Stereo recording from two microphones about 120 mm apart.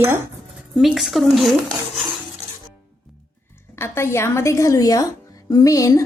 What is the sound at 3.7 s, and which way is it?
A woman's voice, 20° left (ahead or behind).